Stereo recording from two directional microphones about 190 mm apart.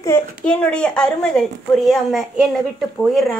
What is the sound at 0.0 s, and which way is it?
A child's voice, 10° left (ahead or behind).